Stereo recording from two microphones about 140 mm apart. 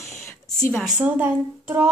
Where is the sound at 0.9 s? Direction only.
10° right (ahead or behind).